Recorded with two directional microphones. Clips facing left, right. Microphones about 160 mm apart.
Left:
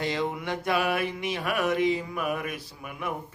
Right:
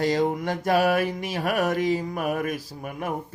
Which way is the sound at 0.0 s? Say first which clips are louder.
Right 6 dB; 40° right (ahead or behind).